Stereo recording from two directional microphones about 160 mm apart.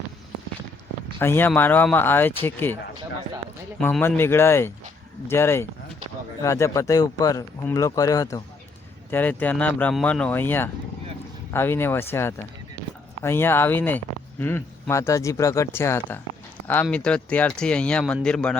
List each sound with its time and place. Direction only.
1.2 s speech: 15° left (ahead or behind)
3.8 s speech: 10° left (ahead or behind)